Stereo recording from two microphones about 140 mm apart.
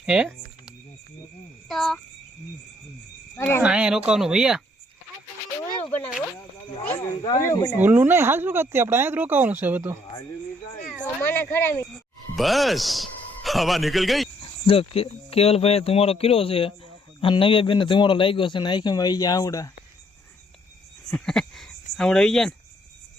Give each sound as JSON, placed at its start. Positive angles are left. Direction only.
{"t": 0.0, "sound": "speech", "side_deg": -5}
{"t": 1.6, "sound": "speech", "side_deg": 0}
{"t": 3.3, "sound": "speech", "side_deg": 15}
{"t": 3.6, "sound": "speech", "side_deg": -10}
{"t": 5.8, "sound": "a sound", "side_deg": 10}
{"t": 6.8, "sound": "speech", "side_deg": 15}
{"t": 7.8, "sound": "speech", "side_deg": -15}
{"t": 11.0, "sound": "speech", "side_deg": 15}
{"t": 12.4, "sound": "a man's voice", "side_deg": 0}
{"t": 14.7, "sound": "a man's voice", "side_deg": 40}
{"t": 21.1, "sound": "speech", "side_deg": 5}